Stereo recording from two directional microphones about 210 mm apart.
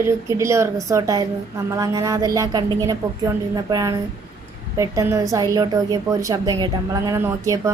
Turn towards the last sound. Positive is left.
turn(degrees=-15)  # may be behind; listen again after turning